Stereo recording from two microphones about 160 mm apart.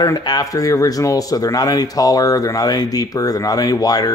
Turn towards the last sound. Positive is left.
turn(degrees=25)  # may be behind; listen again after turning